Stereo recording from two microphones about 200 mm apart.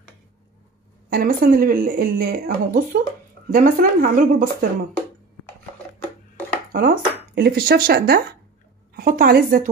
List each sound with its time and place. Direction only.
1.1 s speech: 45° right (ahead or behind)
6.7 s a woman's voice: 45° right (ahead or behind)